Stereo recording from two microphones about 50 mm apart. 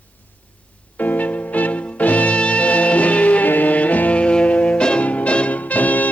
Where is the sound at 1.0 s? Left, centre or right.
Left.